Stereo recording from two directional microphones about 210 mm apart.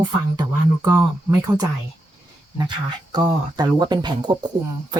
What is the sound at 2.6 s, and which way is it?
Speech, 20° right (ahead or behind).